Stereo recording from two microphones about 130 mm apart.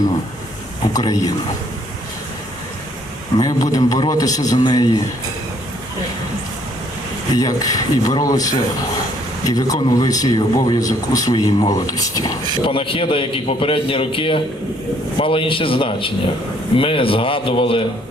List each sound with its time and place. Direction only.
0.9 s speech: 30° left (ahead or behind)
3.3 s speech: 25° left (ahead or behind)
7.3 s speech: 30° left (ahead or behind)
12.6 s a man's voice: 40° left (ahead or behind)